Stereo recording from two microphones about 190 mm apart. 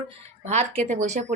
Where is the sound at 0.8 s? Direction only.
40° right (ahead or behind).